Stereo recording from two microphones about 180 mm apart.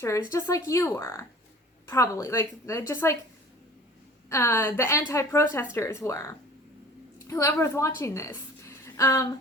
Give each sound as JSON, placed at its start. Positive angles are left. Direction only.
{"t": 0.3, "sound": "a woman's voice", "side_deg": 15}
{"t": 4.3, "sound": "a woman's voice", "side_deg": 15}